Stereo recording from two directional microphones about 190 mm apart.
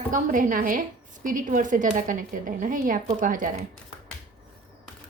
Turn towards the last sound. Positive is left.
turn(degrees=-45)  # may be behind; listen again after turning